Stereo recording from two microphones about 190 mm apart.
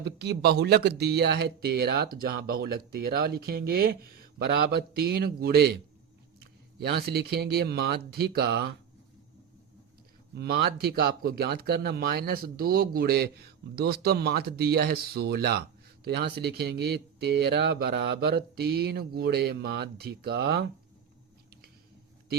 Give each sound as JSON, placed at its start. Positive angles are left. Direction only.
{"t": 0.0, "sound": "speech", "side_deg": -60}
{"t": 6.7, "sound": "speech", "side_deg": -60}
{"t": 10.3, "sound": "speech", "side_deg": -60}